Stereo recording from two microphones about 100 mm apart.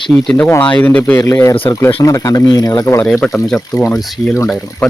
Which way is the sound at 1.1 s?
30° left (ahead or behind).